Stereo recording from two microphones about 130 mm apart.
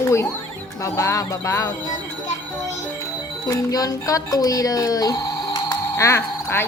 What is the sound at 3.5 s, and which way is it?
Speech, 30° left (ahead or behind).